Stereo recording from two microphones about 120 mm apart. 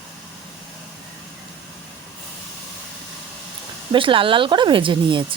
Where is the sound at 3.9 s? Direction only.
45° right (ahead or behind).